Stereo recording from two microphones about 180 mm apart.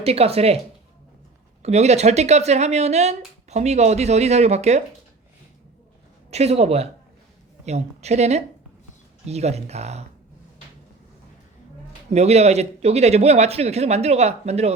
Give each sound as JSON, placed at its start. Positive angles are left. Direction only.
{"t": 0.0, "sound": "speech", "side_deg": -35}
{"t": 1.6, "sound": "speech", "side_deg": -35}
{"t": 6.3, "sound": "speech", "side_deg": -35}
{"t": 12.1, "sound": "speech", "side_deg": -35}